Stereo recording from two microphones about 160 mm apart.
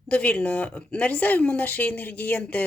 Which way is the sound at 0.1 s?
10° left (ahead or behind).